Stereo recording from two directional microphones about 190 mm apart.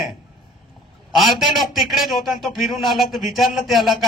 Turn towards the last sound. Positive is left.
turn(degrees=0)  # may be behind; listen again after turning